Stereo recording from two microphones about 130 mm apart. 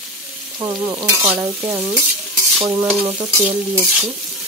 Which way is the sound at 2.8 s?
Centre (ahead or behind).